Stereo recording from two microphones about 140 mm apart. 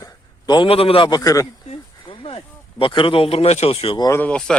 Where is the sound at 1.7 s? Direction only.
40° left (ahead or behind).